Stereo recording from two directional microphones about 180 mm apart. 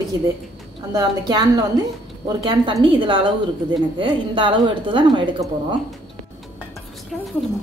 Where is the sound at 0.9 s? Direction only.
20° right (ahead or behind).